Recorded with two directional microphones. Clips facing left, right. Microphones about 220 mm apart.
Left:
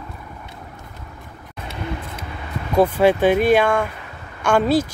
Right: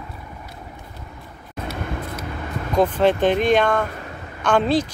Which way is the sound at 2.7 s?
10° left (ahead or behind).